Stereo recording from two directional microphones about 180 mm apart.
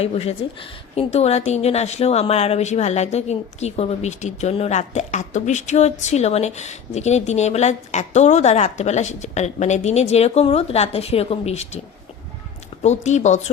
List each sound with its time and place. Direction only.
0.0 s speech: 35° left (ahead or behind)
12.8 s speech: 40° left (ahead or behind)